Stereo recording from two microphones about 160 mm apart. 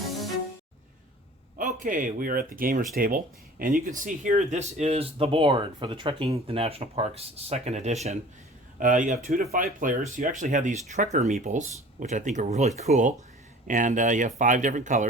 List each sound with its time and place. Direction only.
1.5 s speech: 55° right (ahead or behind)